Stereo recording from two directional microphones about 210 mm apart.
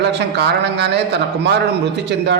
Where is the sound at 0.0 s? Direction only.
55° right (ahead or behind).